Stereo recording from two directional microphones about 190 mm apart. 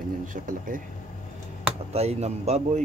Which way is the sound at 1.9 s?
35° right (ahead or behind).